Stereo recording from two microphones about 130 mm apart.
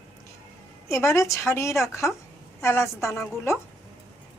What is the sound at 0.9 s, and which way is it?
A woman's voice, 20° left (ahead or behind).